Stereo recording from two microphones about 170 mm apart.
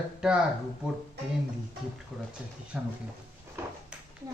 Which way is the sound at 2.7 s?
5° right (ahead or behind).